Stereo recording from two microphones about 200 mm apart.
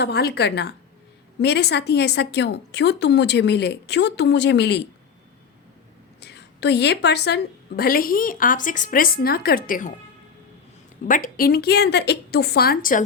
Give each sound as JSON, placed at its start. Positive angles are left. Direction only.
{"t": 0.0, "sound": "a woman's voice", "side_deg": 55}
{"t": 6.1, "sound": "a woman's voice", "side_deg": 55}
{"t": 11.0, "sound": "a woman's voice", "side_deg": 40}